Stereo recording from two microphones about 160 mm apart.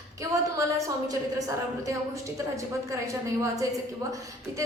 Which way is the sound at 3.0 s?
20° right (ahead or behind).